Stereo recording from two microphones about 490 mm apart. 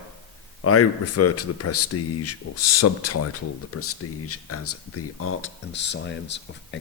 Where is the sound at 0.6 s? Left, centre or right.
Left.